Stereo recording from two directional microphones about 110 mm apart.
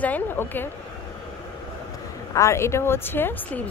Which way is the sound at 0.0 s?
15° left (ahead or behind).